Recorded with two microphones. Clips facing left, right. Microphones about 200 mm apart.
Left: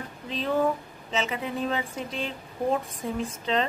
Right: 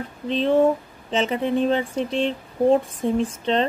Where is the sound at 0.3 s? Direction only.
25° right (ahead or behind).